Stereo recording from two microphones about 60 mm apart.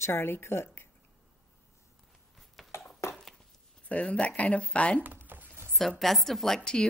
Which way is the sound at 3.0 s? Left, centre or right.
Left.